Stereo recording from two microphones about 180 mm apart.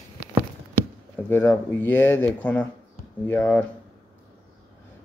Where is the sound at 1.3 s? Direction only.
10° left (ahead or behind).